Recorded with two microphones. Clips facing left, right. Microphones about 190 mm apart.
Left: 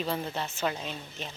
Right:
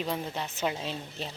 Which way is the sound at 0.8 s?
30° right (ahead or behind).